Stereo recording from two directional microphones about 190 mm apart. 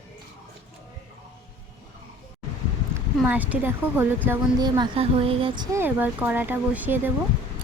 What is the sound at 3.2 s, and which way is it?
Speech, 10° right (ahead or behind).